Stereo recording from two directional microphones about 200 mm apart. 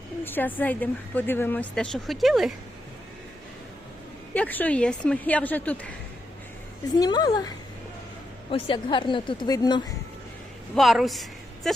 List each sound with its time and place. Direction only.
0.3 s speech: 10° left (ahead or behind)
4.4 s speech: 10° left (ahead or behind)
6.9 s a woman's voice: 20° left (ahead or behind)
10.8 s a woman's voice: centre (ahead or behind)